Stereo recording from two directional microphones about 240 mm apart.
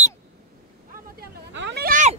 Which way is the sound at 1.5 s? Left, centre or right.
Right.